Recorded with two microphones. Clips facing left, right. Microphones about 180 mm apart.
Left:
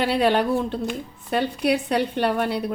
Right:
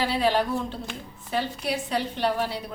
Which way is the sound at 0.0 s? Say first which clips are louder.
Left 4 dB; 65° left (ahead or behind).